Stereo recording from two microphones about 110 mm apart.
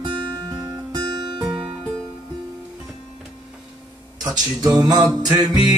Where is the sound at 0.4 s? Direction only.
35° right (ahead or behind).